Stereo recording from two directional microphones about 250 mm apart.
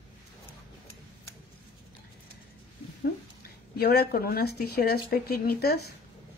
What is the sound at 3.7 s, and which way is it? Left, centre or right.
Speech, left.